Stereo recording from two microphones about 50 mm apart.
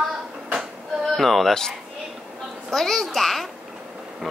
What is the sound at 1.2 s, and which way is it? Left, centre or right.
Speech, centre.